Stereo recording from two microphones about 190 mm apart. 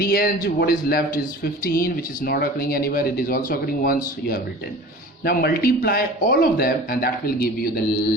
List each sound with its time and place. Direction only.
0.0 s speech: 50° left (ahead or behind)